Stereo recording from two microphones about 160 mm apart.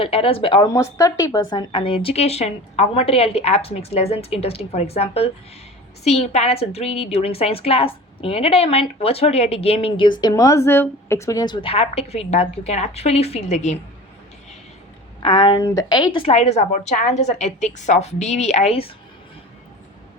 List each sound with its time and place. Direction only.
0.0 s a woman's voice: 35° left (ahead or behind)
0.7 s a woman's voice: 20° left (ahead or behind); by 13.7 s 45° left (ahead or behind)
15.2 s a woman's voice: 30° left (ahead or behind)